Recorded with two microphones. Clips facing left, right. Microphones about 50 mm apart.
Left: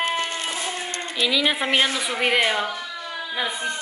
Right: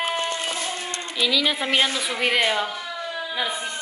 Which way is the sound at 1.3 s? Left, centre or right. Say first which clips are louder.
Left 1 dB; centre.